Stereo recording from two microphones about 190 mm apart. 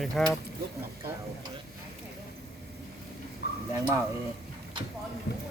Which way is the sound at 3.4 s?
60° left (ahead or behind).